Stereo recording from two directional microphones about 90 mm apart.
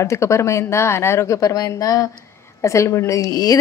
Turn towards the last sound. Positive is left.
turn(degrees=40)  # may be behind; listen again after turning